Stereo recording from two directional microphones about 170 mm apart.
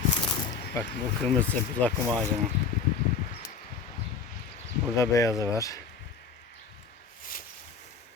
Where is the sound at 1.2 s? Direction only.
10° left (ahead or behind).